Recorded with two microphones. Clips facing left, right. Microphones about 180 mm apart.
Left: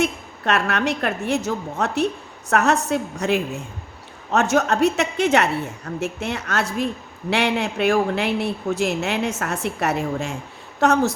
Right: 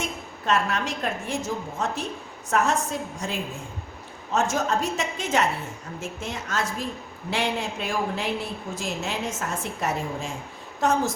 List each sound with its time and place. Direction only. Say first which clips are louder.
0.0 s a woman's voice: left 8 dB; 70° left (ahead or behind)